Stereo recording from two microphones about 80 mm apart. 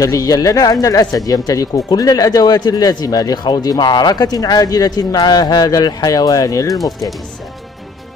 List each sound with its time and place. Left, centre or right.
0.0 s speech: left